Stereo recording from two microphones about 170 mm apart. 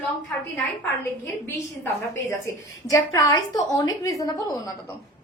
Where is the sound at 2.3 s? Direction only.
15° left (ahead or behind).